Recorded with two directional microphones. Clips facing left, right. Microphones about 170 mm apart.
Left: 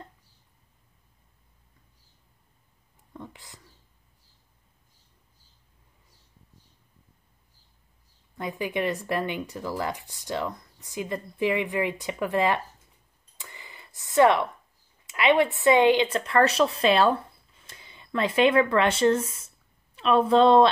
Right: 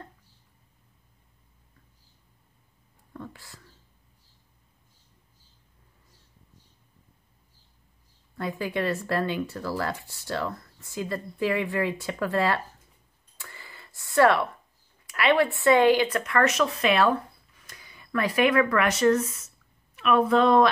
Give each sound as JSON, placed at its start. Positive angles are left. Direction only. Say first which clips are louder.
{"t": 3.1, "sound": "whispering", "louder": "right 2 dB", "side_deg": 20}
{"t": 8.4, "sound": "speech", "louder": "even", "side_deg": 20}
{"t": 13.4, "sound": "a sound", "louder": "even", "side_deg": 20}
{"t": 15.0, "sound": "a woman's voice", "louder": "left 1 dB", "side_deg": 20}